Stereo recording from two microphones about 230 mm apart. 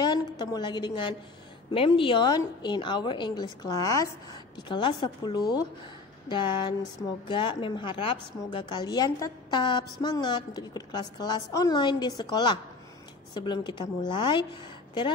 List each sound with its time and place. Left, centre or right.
0.0 s a woman's voice: centre